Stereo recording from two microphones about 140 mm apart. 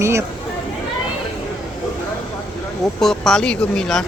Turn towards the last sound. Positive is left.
turn(degrees=5)  # may be behind; listen again after turning